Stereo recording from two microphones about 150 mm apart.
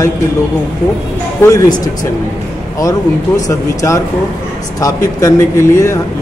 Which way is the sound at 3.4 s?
20° left (ahead or behind).